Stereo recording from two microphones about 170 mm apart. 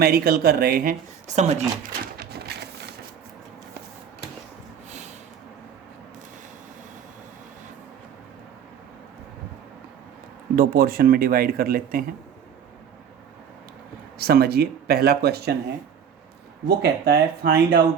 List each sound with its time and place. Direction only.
0.0 s speech: 65° right (ahead or behind)
1.4 s speech: 40° right (ahead or behind)
2.1 s a sound: 70° right (ahead or behind)
10.5 s speech: 60° right (ahead or behind)
14.2 s speech: 65° right (ahead or behind)
16.6 s speech: 70° right (ahead or behind)